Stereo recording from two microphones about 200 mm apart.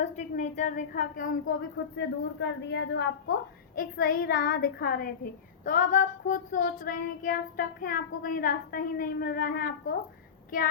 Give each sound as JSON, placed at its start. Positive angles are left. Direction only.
{"t": 0.0, "sound": "a woman's voice", "side_deg": 35}
{"t": 2.0, "sound": "a woman's voice", "side_deg": 65}
{"t": 3.8, "sound": "a woman's voice", "side_deg": 45}